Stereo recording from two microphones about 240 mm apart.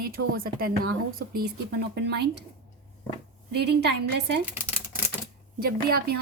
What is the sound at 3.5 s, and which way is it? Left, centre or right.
Speech, right.